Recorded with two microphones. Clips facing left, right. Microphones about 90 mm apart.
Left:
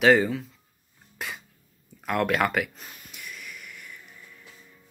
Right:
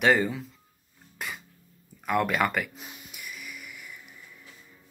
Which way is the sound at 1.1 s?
Centre (ahead or behind).